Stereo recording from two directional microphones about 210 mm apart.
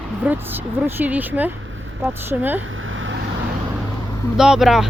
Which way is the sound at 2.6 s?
70° right (ahead or behind).